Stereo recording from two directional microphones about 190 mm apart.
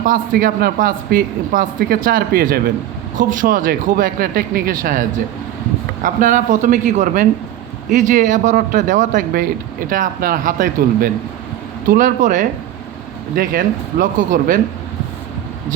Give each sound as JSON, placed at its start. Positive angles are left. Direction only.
{"t": 0.0, "sound": "speech", "side_deg": -45}